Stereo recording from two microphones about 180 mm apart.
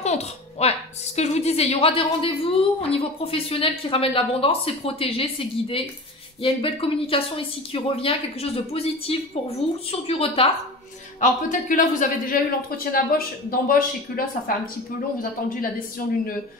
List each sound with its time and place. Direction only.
0.0 s a woman's voice: 35° left (ahead or behind)
11.1 s speech: 45° left (ahead or behind)
16.0 s speech: 50° left (ahead or behind)